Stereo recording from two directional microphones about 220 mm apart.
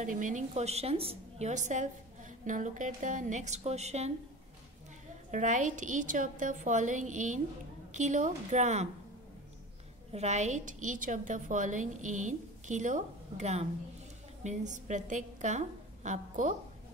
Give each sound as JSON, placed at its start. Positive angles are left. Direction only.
{"t": 0.0, "sound": "a woman's voice", "side_deg": -35}
{"t": 5.3, "sound": "a woman's voice", "side_deg": -35}
{"t": 10.1, "sound": "a woman's voice", "side_deg": -30}